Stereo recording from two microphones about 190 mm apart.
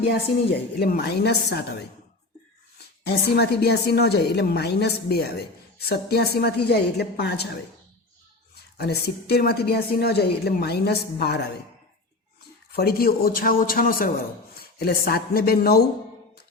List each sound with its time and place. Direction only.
0.1 s a woman's voice: 55° left (ahead or behind)
3.1 s a woman's voice: 60° left (ahead or behind)
8.8 s a woman's voice: 55° left (ahead or behind)
12.7 s a man's voice: 55° left (ahead or behind)